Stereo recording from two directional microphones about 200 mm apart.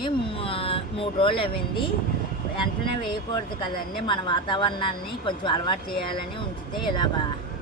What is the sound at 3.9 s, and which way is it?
Speech, 25° left (ahead or behind).